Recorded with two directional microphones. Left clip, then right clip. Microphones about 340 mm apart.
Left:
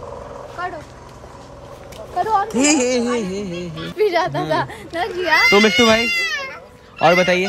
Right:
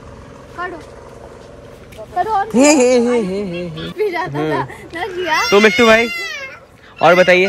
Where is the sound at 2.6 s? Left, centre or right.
Centre.